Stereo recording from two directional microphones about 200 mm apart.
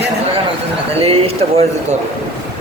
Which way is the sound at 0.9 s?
30° right (ahead or behind).